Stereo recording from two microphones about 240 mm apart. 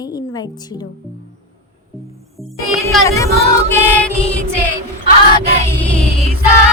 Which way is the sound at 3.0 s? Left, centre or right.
Centre.